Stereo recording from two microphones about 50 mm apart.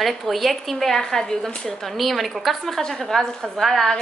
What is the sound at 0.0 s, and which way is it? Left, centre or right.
A woman's voice, centre.